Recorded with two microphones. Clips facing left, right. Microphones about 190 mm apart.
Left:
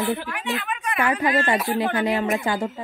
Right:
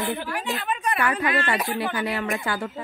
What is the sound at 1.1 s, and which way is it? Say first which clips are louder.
Speech: left 3 dB; 35° left (ahead or behind).